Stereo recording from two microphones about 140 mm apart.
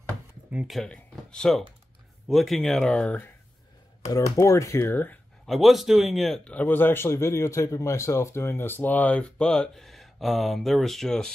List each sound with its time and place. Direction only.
0.5 s speech: 5° right (ahead or behind)
4.1 s speech: 25° left (ahead or behind)
5.5 s a man's voice: centre (ahead or behind)